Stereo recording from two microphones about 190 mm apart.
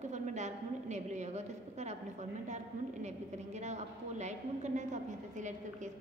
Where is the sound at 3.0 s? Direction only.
35° right (ahead or behind).